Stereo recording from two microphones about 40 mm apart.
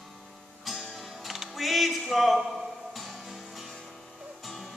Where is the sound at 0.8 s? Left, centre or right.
Centre.